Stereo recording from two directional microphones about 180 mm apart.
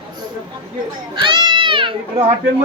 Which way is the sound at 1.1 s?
25° right (ahead or behind).